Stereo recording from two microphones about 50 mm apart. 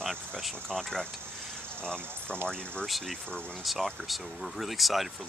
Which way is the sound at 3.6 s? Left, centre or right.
Centre.